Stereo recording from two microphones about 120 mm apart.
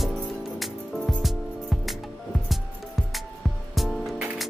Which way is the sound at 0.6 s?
Centre (ahead or behind).